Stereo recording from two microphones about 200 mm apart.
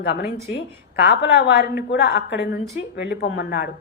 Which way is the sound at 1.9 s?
55° left (ahead or behind).